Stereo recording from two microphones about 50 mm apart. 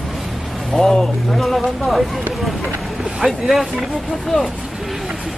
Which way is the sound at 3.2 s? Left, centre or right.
Centre.